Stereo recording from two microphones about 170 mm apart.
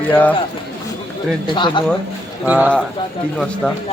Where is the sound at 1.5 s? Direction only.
30° left (ahead or behind).